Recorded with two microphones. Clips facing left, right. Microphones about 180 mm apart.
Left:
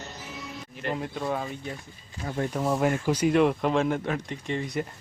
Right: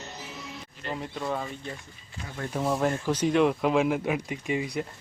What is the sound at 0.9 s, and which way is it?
Speech, 5° left (ahead or behind).